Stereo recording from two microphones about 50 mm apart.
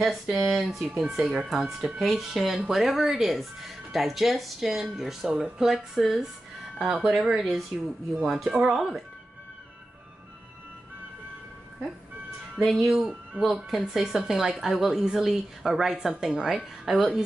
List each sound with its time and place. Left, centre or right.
0.0 s a woman's voice: centre
12.6 s a woman's voice: centre